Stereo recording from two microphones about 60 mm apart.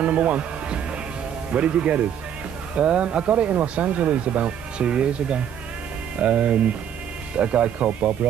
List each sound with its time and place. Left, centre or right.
0.0 s speech: right